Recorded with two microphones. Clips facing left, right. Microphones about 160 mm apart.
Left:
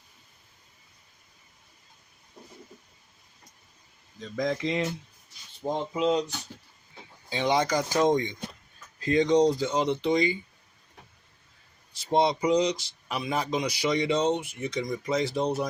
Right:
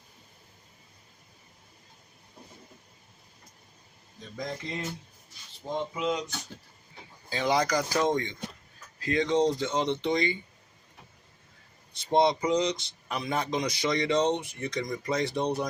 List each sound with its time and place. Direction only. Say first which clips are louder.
4.4 s speech: left 8 dB; 90° left
5.6 s speech: left 4 dB; 35° left (ahead or behind)
7.3 s speech: left 1 dB; 20° left (ahead or behind)
12.1 s speech: left 1 dB; 5° left (ahead or behind)